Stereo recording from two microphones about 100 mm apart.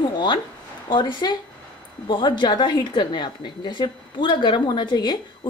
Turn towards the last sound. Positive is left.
turn(degrees=45)  # may be behind; listen again after turning